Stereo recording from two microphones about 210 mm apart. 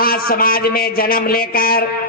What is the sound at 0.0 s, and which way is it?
A man's voice, 45° left (ahead or behind).